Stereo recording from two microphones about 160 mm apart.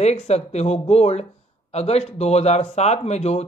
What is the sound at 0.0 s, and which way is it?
Speech, 45° left (ahead or behind).